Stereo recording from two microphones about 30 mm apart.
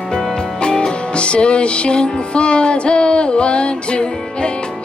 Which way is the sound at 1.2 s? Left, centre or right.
Left.